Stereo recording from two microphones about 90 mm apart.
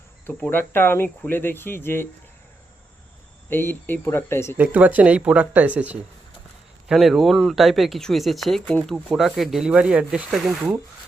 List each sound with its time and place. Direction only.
0.4 s speech: 20° left (ahead or behind)
3.5 s speech: 25° left (ahead or behind)
4.5 s speech: 15° right (ahead or behind)
6.8 s speech: centre (ahead or behind)